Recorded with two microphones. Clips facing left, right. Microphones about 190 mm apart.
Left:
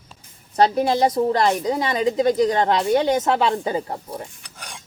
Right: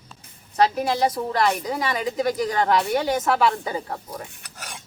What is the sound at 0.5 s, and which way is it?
A woman's voice, 30° left (ahead or behind).